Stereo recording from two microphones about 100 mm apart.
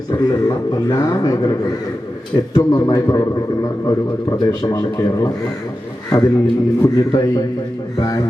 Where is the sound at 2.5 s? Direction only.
35° left (ahead or behind).